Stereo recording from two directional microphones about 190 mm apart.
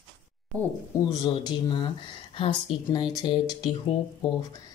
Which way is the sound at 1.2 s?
25° left (ahead or behind).